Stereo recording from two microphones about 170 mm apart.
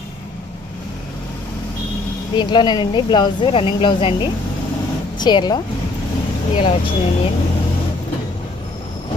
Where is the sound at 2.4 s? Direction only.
25° left (ahead or behind).